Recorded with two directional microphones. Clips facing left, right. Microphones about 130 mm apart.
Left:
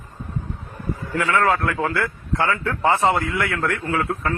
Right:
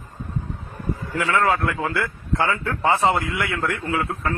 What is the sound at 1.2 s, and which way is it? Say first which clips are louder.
Speech: left 1 dB; 25° right (ahead or behind).